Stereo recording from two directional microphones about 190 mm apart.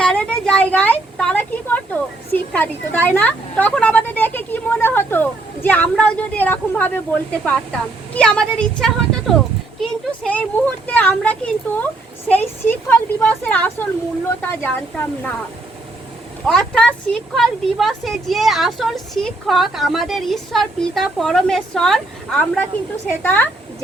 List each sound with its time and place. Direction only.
0.0 s a woman's voice: 5° left (ahead or behind)
16.5 s a woman's voice: 5° left (ahead or behind)